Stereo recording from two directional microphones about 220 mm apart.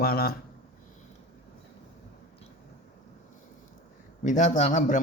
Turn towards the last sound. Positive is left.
turn(degrees=35)  # may be behind; listen again after turning